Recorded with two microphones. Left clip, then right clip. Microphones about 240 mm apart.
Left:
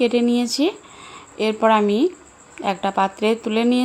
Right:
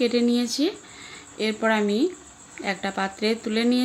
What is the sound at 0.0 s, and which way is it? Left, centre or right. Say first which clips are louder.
A woman's voice: left 4 dB; centre.